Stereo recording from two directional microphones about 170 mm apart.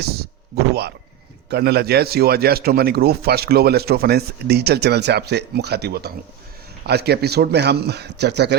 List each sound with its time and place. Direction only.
0.0 s speech: 70° right (ahead or behind)